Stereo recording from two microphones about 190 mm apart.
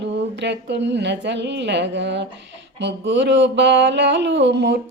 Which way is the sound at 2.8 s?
70° right (ahead or behind).